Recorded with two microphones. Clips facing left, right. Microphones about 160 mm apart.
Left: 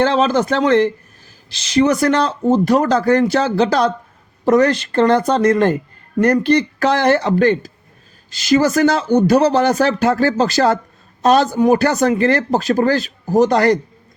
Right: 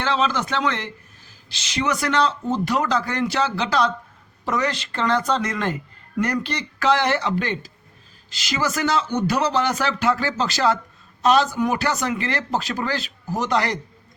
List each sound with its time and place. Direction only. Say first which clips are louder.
0.0 s speech: left 8 dB; 45° left (ahead or behind)